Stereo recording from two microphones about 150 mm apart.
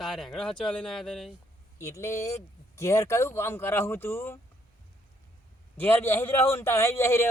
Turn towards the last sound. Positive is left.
turn(degrees=15)  # may be behind; listen again after turning